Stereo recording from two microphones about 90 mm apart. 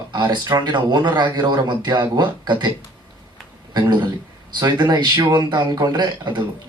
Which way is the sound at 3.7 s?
55° right (ahead or behind).